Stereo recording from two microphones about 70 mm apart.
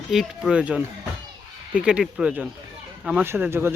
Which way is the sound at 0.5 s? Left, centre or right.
Centre.